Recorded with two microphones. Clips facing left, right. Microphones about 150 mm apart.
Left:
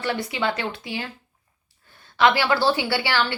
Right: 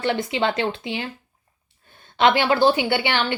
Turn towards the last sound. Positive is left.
turn(degrees=-20)  # may be behind; listen again after turning